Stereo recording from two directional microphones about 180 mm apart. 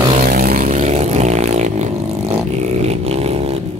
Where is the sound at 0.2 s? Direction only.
55° right (ahead or behind).